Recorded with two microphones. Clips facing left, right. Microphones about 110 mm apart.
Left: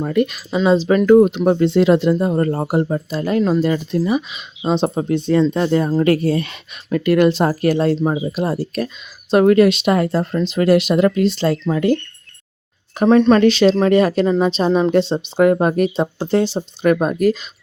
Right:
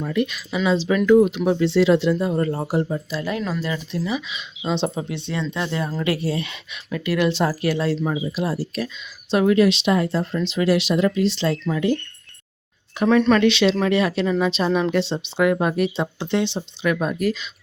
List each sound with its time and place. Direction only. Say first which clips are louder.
0.0 s speech: left 5 dB; 45° left (ahead or behind)
13.0 s speech: left 5 dB; 30° left (ahead or behind)
13.4 s speech: left 5 dB; 40° left (ahead or behind)